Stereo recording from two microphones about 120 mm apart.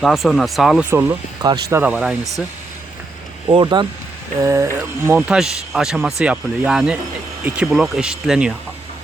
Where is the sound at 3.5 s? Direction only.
40° right (ahead or behind).